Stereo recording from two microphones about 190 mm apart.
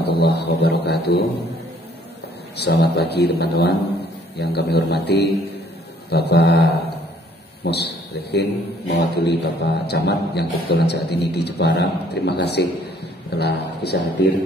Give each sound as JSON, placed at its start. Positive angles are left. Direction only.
{"t": 0.0, "sound": "speech", "side_deg": 60}
{"t": 2.5, "sound": "a man's voice", "side_deg": 60}
{"t": 7.7, "sound": "a man's voice", "side_deg": 60}